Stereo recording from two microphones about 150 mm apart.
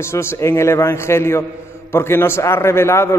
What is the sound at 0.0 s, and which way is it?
A man's voice, 15° left (ahead or behind).